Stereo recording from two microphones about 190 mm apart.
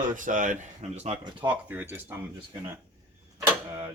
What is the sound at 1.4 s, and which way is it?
Speech, 10° right (ahead or behind).